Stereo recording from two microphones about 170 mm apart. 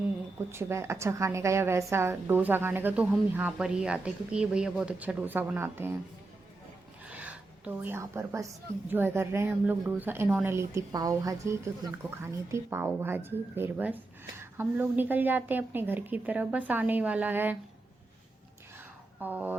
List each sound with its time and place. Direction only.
0.5 s a woman's voice: 15° right (ahead or behind)
7.1 s a sound: 10° right (ahead or behind)
8.9 s a woman's voice: 10° right (ahead or behind)
19.2 s a woman's voice: 10° right (ahead or behind)